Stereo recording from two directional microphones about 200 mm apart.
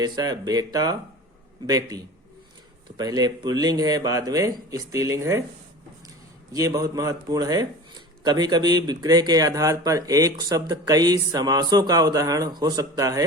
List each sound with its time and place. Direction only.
0.0 s speech: 20° right (ahead or behind)
6.5 s speech: 20° right (ahead or behind)